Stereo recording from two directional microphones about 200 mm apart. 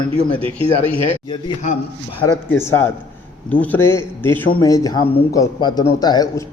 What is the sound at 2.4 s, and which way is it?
A man's voice, 10° left (ahead or behind).